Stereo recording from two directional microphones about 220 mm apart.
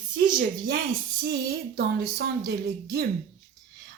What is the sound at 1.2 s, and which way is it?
Speech, 45° right (ahead or behind).